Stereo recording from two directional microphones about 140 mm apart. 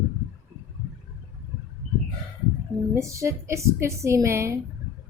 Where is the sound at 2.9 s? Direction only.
20° right (ahead or behind).